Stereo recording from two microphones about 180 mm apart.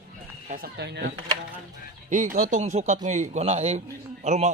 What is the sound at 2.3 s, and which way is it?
A man's voice, 45° right (ahead or behind).